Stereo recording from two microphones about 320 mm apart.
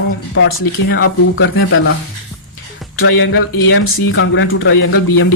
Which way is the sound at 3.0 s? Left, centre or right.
Left.